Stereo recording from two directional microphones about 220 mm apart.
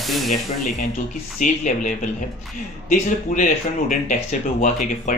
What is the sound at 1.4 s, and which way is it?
Speech, 35° left (ahead or behind).